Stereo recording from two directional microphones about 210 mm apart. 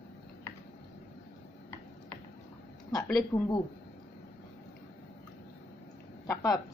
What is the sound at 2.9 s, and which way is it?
Speech, 5° left (ahead or behind).